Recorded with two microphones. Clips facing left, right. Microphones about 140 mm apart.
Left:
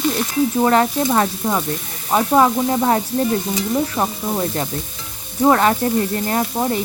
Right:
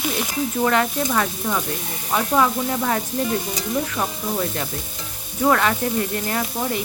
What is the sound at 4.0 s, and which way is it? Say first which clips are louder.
Speech: left 3 dB; 30° left (ahead or behind).